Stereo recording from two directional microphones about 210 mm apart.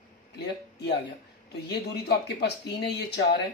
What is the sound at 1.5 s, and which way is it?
Speech, 50° left (ahead or behind).